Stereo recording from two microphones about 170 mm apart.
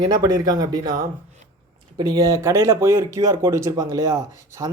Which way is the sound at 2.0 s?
20° right (ahead or behind).